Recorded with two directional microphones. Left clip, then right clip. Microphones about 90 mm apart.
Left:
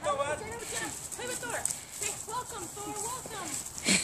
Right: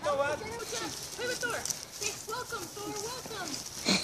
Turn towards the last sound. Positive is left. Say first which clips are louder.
# left 1 dB
turn(degrees=0)  # may be behind; listen again after turning